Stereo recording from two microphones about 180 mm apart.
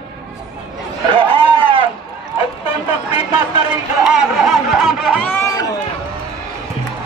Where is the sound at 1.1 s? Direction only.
30° right (ahead or behind).